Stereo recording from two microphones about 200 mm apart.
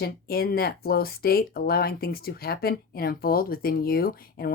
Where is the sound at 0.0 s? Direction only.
50° left (ahead or behind).